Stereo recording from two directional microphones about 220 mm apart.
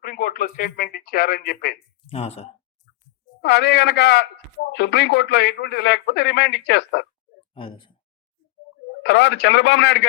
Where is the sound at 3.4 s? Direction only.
50° left (ahead or behind).